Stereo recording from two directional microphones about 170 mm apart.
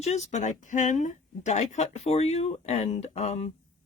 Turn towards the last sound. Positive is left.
turn(degrees=40)  # may be behind; listen again after turning